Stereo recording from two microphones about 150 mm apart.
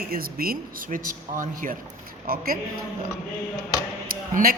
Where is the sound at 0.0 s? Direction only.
80° right; by 1.7 s 65° right (ahead or behind).